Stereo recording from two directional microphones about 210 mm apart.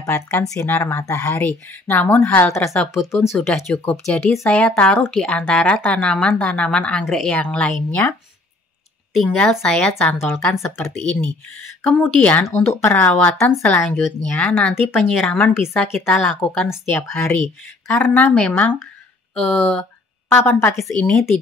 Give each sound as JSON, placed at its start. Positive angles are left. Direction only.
{"t": 0.0, "sound": "speech", "side_deg": 15}
{"t": 11.9, "sound": "a woman's voice", "side_deg": 5}